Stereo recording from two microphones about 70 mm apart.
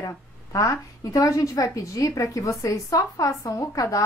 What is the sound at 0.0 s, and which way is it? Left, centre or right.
A woman's voice, left.